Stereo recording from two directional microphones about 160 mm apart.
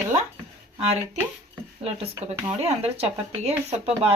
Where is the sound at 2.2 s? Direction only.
45° right (ahead or behind).